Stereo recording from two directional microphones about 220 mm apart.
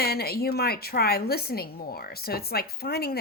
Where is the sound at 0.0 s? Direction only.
45° left (ahead or behind).